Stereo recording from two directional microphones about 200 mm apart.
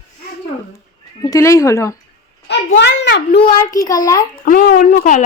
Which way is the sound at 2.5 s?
60° left (ahead or behind).